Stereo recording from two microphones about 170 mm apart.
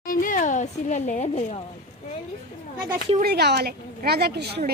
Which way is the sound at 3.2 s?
70° right (ahead or behind).